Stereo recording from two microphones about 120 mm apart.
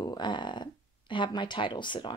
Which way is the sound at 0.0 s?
35° left (ahead or behind).